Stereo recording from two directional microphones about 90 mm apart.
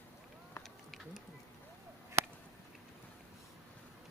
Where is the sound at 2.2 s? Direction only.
30° right (ahead or behind).